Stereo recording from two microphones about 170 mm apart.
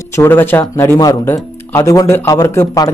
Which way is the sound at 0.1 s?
15° left (ahead or behind).